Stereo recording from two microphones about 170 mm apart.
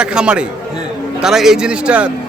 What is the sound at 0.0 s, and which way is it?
A man's voice, 5° right (ahead or behind).